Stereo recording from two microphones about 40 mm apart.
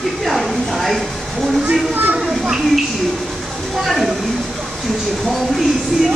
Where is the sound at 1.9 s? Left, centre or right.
Right.